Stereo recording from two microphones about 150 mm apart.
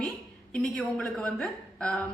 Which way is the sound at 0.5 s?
5° left (ahead or behind).